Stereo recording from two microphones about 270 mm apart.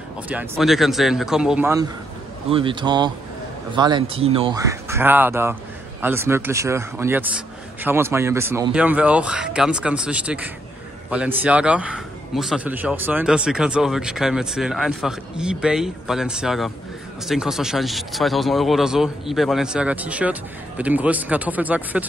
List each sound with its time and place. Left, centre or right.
0.3 s a man's voice: centre
2.5 s a man's voice: centre